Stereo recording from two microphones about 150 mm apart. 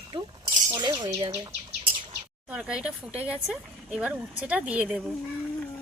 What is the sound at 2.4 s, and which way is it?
Speech, 5° right (ahead or behind).